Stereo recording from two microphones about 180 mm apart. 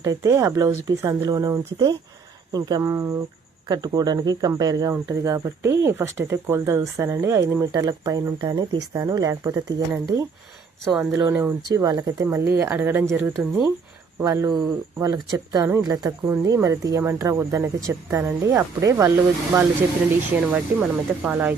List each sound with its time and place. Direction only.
0.0 s speech: 20° right (ahead or behind)
10.8 s speech: centre (ahead or behind)
11.2 s speech: 15° right (ahead or behind)
20.7 s speech: 10° right (ahead or behind)